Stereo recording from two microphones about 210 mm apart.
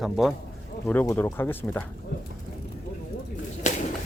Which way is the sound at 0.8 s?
10° left (ahead or behind).